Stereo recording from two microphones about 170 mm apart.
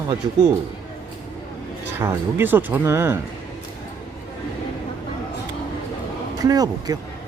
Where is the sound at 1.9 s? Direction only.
15° right (ahead or behind).